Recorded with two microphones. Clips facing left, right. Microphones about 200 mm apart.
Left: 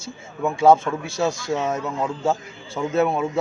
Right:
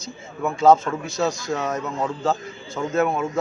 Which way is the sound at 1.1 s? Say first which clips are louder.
Even; 30° left (ahead or behind).